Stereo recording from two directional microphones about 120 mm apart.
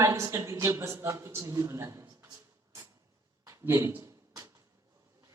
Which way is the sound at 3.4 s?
20° right (ahead or behind).